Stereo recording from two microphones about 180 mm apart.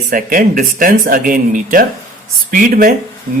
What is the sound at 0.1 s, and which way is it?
Speech, 50° right (ahead or behind).